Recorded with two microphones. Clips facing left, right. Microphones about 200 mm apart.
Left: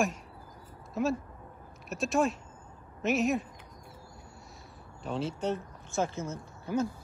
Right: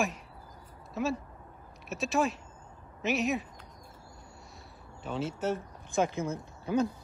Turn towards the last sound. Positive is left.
turn(degrees=-15)  # may be behind; listen again after turning